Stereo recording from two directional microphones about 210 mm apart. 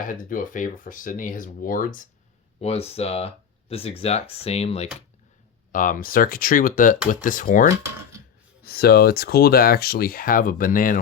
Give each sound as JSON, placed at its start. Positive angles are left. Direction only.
{"t": 0.0, "sound": "speech", "side_deg": 40}
{"t": 2.6, "sound": "speech", "side_deg": 30}